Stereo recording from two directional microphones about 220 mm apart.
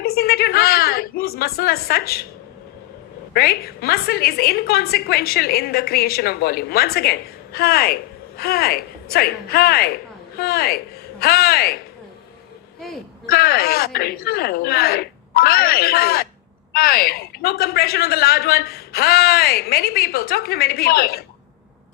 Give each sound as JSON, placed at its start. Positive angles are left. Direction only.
{"t": 0.0, "sound": "a sound", "side_deg": 45}
{"t": 1.4, "sound": "a woman's voice", "side_deg": 45}
{"t": 3.3, "sound": "a woman's voice", "side_deg": 45}
{"t": 13.2, "sound": "a woman's voice", "side_deg": 45}